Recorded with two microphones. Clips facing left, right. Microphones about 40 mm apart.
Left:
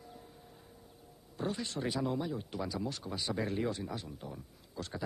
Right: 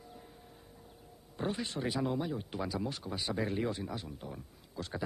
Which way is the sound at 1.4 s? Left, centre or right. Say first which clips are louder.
Right 1 dB; centre.